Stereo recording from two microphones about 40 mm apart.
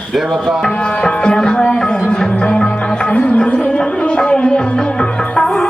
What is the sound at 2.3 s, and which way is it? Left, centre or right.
Music, left.